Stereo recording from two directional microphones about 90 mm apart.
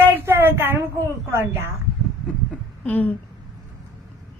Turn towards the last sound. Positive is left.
turn(degrees=20)  # may be behind; listen again after turning